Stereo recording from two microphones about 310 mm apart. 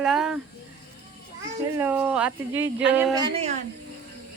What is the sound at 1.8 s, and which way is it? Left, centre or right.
Speech, centre.